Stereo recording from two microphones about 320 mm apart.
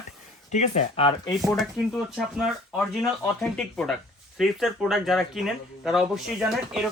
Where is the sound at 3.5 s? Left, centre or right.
Centre.